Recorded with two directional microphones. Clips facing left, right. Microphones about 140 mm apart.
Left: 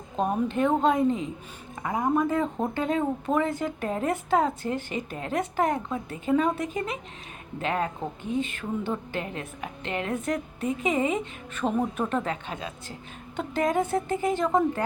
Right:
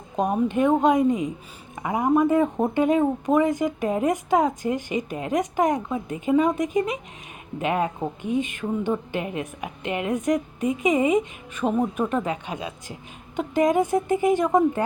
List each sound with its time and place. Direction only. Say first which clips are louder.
0.2 s speech: right 3 dB; 15° right (ahead or behind)